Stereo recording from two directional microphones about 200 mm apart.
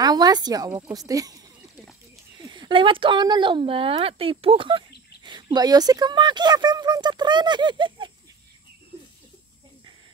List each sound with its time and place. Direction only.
0.0 s speech: 20° right (ahead or behind)
2.4 s speech: 20° right (ahead or behind)